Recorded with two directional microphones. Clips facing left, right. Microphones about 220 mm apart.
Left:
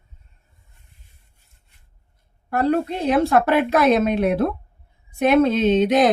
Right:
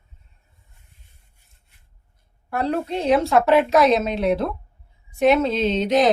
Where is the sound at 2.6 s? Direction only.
55° left (ahead or behind).